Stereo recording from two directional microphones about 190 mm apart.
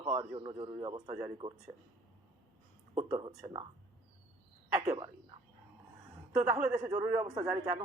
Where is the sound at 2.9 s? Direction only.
25° right (ahead or behind).